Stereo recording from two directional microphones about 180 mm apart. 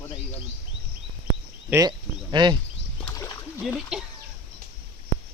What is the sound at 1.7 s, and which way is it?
Speech, 20° right (ahead or behind).